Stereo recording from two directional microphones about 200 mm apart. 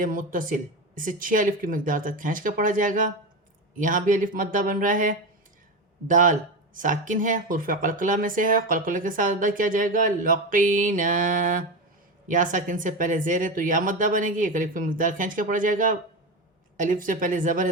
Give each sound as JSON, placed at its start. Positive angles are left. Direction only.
{"t": 0.0, "sound": "speech", "side_deg": -45}